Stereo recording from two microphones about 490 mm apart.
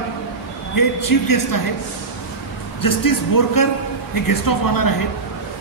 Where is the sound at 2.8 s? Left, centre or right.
Left.